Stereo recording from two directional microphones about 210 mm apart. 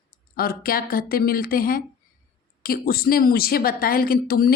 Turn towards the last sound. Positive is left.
turn(degrees=45)  # may be behind; listen again after turning